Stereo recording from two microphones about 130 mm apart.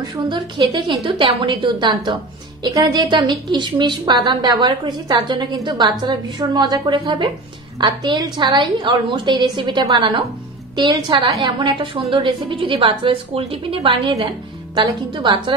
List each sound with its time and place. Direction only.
0.1 s a woman's voice: 35° right (ahead or behind)